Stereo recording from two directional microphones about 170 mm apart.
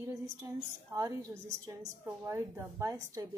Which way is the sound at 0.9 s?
20° right (ahead or behind).